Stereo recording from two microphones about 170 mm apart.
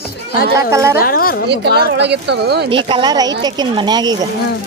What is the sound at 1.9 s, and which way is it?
Speech, 90° right.